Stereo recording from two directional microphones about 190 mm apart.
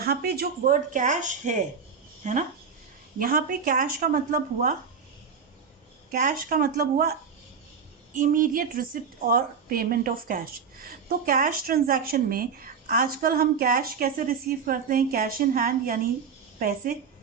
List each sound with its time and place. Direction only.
0.0 s a woman's voice: 55° right (ahead or behind)
6.1 s a woman's voice: 45° right (ahead or behind)